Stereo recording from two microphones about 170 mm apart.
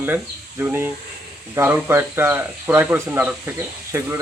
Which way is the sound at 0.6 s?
10° right (ahead or behind).